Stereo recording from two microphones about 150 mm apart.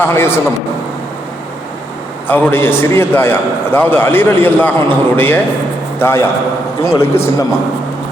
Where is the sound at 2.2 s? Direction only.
15° left (ahead or behind).